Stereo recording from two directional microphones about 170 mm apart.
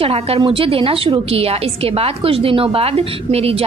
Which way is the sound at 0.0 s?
35° right (ahead or behind).